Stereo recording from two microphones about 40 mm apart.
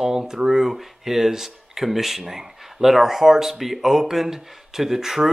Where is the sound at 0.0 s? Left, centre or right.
Centre.